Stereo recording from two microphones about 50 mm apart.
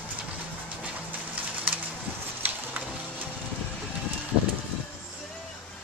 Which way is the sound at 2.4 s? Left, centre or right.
Right.